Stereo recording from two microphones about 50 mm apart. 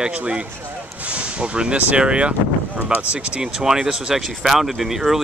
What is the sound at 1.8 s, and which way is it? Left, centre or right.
Speech, right.